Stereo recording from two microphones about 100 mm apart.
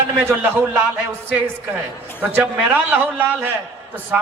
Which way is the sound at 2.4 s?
15° right (ahead or behind).